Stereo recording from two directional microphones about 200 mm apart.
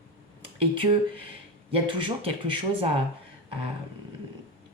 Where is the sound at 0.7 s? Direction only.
25° right (ahead or behind).